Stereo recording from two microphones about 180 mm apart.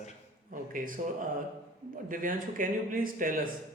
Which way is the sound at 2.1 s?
50° right (ahead or behind).